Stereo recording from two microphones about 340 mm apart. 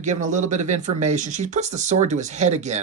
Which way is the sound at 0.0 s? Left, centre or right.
Right.